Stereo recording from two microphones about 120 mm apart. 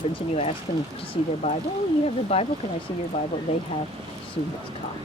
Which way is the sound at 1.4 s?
50° left (ahead or behind).